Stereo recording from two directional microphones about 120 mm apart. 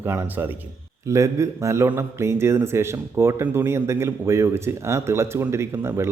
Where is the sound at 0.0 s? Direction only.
20° right (ahead or behind).